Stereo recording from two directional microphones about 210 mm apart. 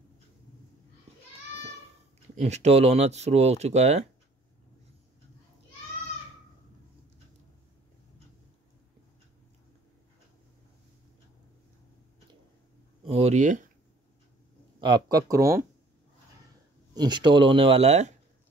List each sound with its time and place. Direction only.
2.4 s speech: 30° right (ahead or behind)
13.0 s a sound: 30° right (ahead or behind)
14.8 s speech: 20° right (ahead or behind)
16.9 s speech: 20° right (ahead or behind)